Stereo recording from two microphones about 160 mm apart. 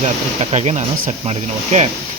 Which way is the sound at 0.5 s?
45° right (ahead or behind).